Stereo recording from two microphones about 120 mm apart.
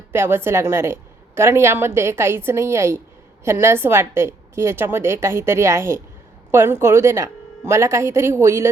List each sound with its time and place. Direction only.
0.1 s a woman's voice: 20° right (ahead or behind)